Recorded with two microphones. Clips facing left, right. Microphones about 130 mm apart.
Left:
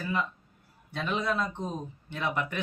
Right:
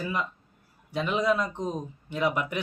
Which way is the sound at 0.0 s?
15° right (ahead or behind).